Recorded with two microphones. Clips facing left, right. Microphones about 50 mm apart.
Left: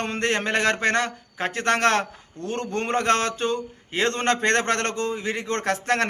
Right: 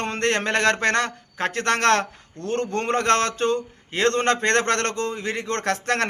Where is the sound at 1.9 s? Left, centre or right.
Right.